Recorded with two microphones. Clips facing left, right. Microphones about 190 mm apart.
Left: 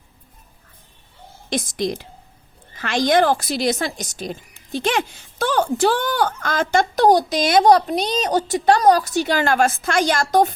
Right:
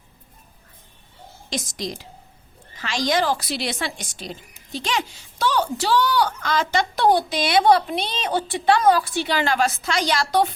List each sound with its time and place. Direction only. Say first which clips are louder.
1.5 s a woman's voice: left 6 dB; 55° left (ahead or behind)